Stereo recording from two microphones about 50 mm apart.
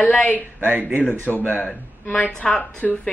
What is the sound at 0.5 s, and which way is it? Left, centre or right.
Speech, right.